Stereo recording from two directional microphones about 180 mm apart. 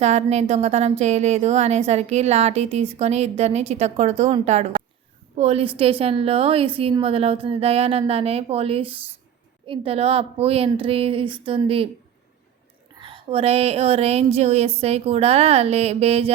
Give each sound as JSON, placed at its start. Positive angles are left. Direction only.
{"t": 0.0, "sound": "speech", "side_deg": -35}
{"t": 13.0, "sound": "speech", "side_deg": -30}